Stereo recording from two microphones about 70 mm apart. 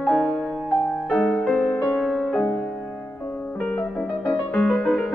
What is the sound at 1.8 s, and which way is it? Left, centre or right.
Music, centre.